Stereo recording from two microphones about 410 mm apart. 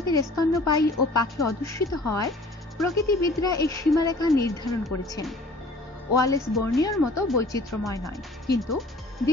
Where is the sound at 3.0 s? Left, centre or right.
Centre.